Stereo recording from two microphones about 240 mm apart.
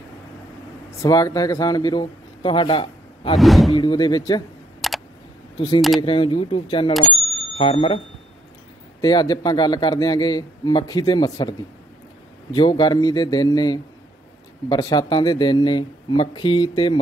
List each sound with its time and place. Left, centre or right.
1.0 s a man's voice: centre
3.3 s speech: centre
3.7 s a man's voice: centre
4.8 s a sound: centre
5.9 s speech: left
6.9 s speech: centre
7.5 s speech: left
9.0 s a man's voice: centre
12.5 s a man's voice: centre